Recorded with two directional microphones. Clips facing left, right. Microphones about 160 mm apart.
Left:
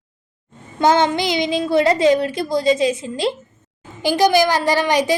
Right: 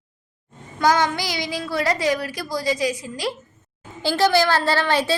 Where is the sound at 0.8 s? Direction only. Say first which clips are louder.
Left 4 dB; 25° left (ahead or behind).